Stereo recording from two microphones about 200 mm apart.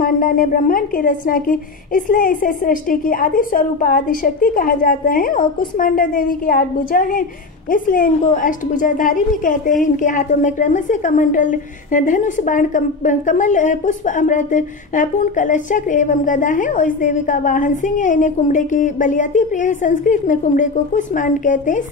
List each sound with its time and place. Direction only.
0.0 s a woman's voice: 45° left (ahead or behind)